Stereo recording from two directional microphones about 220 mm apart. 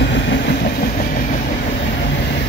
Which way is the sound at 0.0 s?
50° left (ahead or behind).